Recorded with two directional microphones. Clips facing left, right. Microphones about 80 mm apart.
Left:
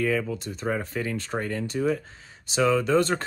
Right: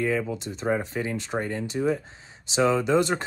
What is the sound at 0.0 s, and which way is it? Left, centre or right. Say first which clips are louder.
Speech: even; right.